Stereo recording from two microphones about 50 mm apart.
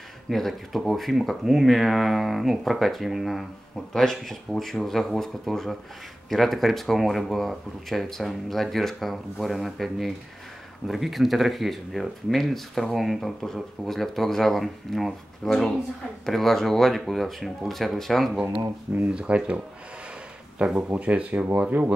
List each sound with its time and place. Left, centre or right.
0.3 s speech: centre
3.9 s speech: centre
19.0 s speech: right